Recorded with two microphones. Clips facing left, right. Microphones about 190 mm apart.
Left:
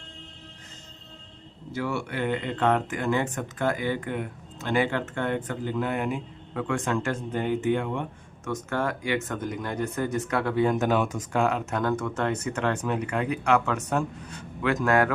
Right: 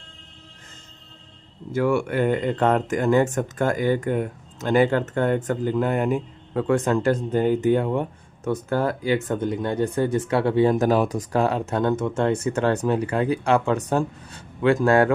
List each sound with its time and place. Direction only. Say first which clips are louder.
1.7 s speech: right 8 dB; 50° right (ahead or behind); by 15.1 s 30° right (ahead or behind)